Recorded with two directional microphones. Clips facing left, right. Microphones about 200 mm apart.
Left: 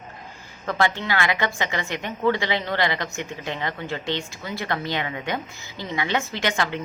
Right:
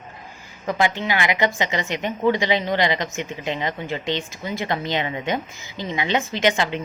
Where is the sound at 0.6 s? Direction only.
15° right (ahead or behind).